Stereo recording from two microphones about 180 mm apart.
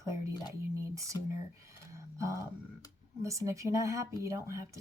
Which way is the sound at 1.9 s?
15° right (ahead or behind).